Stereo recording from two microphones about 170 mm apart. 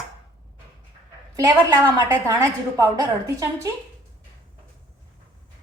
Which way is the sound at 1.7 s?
20° right (ahead or behind).